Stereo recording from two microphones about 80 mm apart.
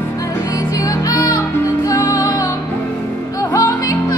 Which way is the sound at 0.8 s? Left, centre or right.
Left.